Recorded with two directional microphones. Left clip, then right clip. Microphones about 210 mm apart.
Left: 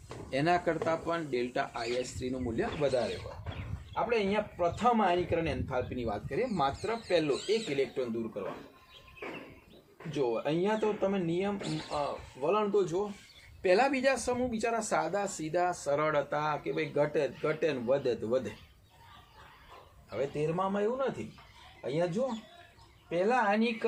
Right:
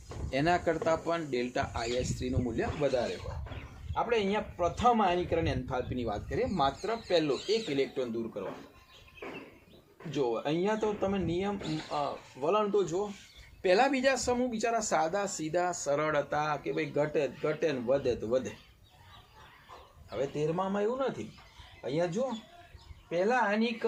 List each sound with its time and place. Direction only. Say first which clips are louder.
0.3 s speech: even; 15° right (ahead or behind)
9.2 s a sound: left 1 dB; 40° left (ahead or behind)
10.2 s speech: even; 20° right (ahead or behind)
20.1 s speech: even; 10° right (ahead or behind)